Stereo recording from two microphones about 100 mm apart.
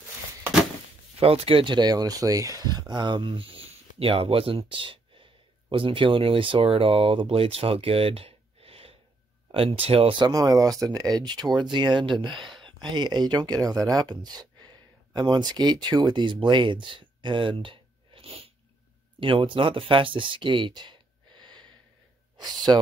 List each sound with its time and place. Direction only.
1.2 s speech: 75° right (ahead or behind)
10.2 s speech: 40° right (ahead or behind)
12.4 s a sound: centre (ahead or behind)
12.9 s speech: 45° right (ahead or behind)